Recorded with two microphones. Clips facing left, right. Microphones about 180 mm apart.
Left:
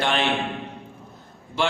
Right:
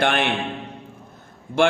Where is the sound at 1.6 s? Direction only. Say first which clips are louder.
Right 6 dB; 50° right (ahead or behind).